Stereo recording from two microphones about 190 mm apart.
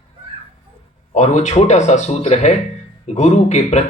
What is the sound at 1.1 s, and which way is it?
Speech, 35° left (ahead or behind).